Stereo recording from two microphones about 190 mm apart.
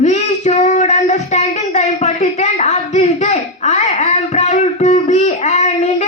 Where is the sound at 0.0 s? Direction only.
40° left (ahead or behind).